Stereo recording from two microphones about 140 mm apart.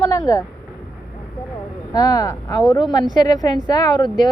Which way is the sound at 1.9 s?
25° left (ahead or behind).